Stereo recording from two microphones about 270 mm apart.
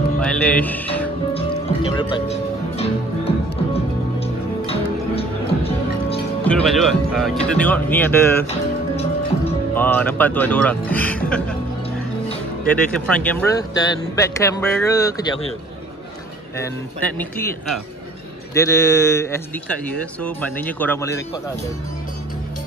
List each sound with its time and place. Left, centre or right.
0.2 s speech: centre
1.3 s music: centre
4.2 s music: left
6.4 s speech: centre
9.8 s speech: centre
12.6 s speech: centre
17.0 s speech: centre
18.5 s speech: centre